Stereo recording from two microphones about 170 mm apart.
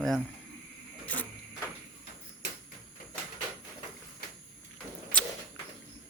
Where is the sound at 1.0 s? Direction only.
10° left (ahead or behind).